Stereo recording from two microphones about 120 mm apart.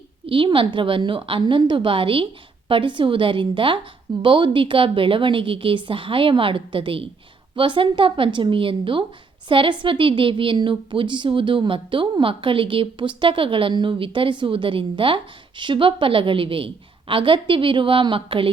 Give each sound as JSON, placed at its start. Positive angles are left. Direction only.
{"t": 0.3, "sound": "a woman's voice", "side_deg": -45}